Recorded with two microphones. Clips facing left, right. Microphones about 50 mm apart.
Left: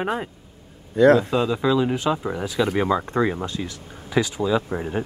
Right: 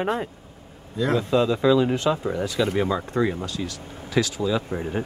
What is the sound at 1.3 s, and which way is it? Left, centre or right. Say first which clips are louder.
Speech: right 2 dB; centre.